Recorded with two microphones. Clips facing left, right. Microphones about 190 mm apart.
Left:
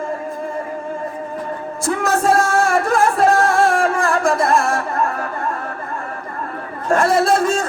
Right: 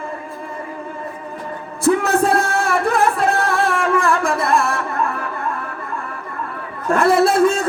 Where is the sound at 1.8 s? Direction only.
60° right (ahead or behind).